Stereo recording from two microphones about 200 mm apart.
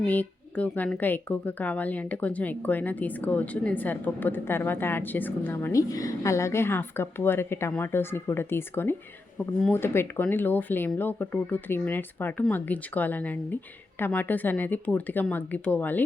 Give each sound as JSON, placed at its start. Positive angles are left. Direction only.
{"t": 0.0, "sound": "a woman's voice", "side_deg": 5}